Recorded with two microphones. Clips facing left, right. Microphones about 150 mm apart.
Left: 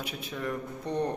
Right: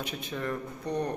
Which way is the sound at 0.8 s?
25° left (ahead or behind).